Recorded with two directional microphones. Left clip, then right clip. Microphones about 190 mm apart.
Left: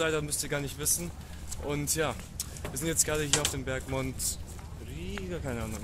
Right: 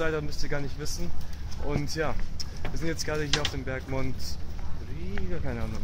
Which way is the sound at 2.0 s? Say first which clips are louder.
Even; 5° left (ahead or behind).